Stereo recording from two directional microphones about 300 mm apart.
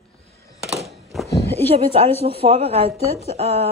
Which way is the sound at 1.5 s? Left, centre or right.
Centre.